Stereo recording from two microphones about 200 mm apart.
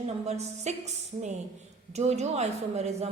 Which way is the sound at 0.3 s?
35° right (ahead or behind).